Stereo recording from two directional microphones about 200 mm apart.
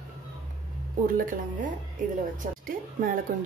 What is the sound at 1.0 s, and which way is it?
A woman's voice, 45° right (ahead or behind).